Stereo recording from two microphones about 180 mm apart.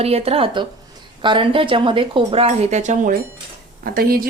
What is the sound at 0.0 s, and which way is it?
A woman's voice, 35° right (ahead or behind).